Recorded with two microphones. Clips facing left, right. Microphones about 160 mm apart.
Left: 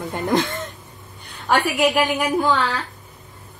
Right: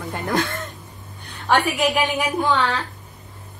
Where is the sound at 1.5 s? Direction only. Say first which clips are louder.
Left 1 dB; centre (ahead or behind).